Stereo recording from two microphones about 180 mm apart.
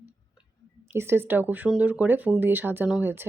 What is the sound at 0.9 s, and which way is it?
Speech, 15° right (ahead or behind).